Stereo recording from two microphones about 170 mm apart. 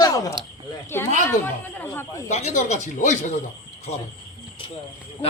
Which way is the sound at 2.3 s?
45° left (ahead or behind).